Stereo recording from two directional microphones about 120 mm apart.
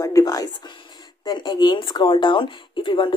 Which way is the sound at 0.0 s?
30° left (ahead or behind).